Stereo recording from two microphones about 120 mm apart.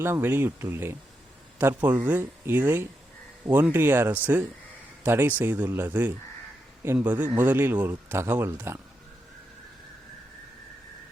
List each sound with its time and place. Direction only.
0.0 s speech: 20° right (ahead or behind)